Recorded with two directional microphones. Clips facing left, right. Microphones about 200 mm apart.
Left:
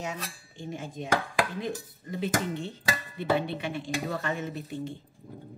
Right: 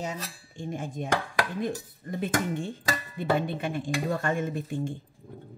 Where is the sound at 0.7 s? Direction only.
50° right (ahead or behind).